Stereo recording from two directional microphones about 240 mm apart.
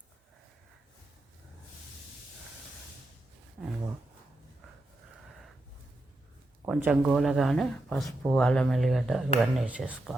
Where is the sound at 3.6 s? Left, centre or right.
Centre.